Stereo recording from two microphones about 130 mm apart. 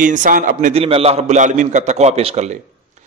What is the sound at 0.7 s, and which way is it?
A man's voice, 50° right (ahead or behind).